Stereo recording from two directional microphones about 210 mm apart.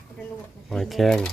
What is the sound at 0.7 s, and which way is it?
Speech, centre (ahead or behind).